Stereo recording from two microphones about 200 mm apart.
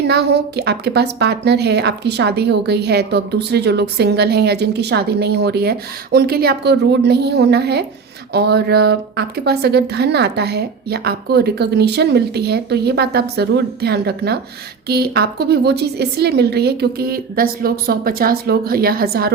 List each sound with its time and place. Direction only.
0.0 s a woman's voice: 55° right (ahead or behind)